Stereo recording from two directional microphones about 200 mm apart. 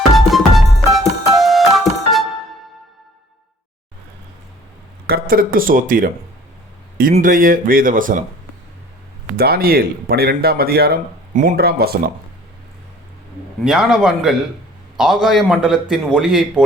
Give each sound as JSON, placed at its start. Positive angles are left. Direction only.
{"t": 0.1, "sound": "music", "side_deg": 0}
{"t": 5.0, "sound": "speech", "side_deg": -50}
{"t": 9.4, "sound": "speech", "side_deg": -50}
{"t": 13.7, "sound": "a man's voice", "side_deg": -5}